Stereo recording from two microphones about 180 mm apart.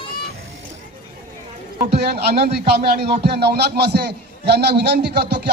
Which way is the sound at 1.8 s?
60° right (ahead or behind).